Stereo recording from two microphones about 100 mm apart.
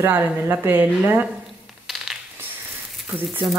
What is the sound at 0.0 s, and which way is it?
Speech, 20° right (ahead or behind).